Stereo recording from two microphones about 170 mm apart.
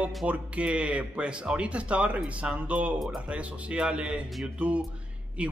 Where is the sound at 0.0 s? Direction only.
10° right (ahead or behind).